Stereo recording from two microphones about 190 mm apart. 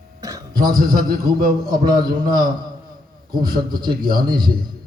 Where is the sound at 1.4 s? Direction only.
50° right (ahead or behind).